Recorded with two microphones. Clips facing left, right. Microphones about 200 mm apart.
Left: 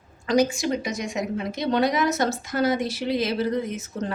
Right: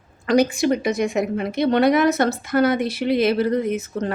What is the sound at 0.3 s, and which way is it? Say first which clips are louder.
A woman's voice: right 4 dB; 60° right (ahead or behind).